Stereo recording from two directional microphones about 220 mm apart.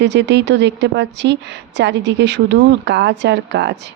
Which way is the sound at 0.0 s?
55° right (ahead or behind).